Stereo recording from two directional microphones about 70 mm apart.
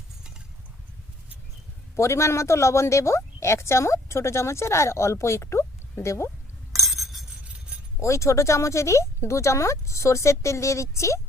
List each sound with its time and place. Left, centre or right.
2.0 s speech: left
6.7 s chink: centre
7.9 s speech: left